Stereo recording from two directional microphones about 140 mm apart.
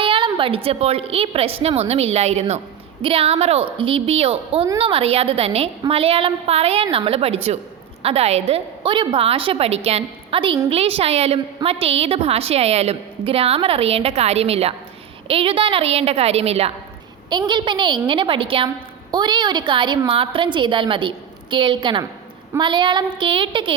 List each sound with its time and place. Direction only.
0.0 s a woman's voice: 40° right (ahead or behind)
17.2 s a woman's voice: 35° right (ahead or behind)